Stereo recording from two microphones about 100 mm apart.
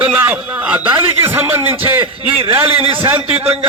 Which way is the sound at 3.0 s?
25° right (ahead or behind).